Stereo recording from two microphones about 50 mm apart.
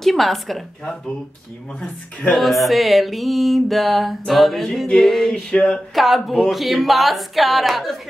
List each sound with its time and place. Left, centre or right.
0.0 s music: centre
2.3 s music: centre
5.3 s a sound: centre
5.9 s music: centre